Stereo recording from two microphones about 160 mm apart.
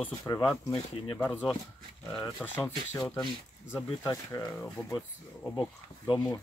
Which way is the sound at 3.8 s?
20° left (ahead or behind).